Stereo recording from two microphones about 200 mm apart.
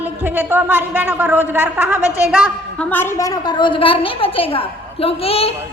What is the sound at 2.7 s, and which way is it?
A woman's voice, 10° left (ahead or behind).